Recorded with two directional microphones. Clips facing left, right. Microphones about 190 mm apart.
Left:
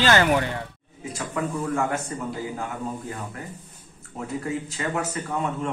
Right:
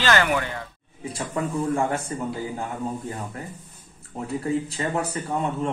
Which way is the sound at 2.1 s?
30° right (ahead or behind).